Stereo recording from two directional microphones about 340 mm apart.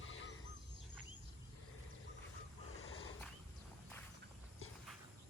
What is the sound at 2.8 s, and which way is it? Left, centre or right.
Wild animals, left.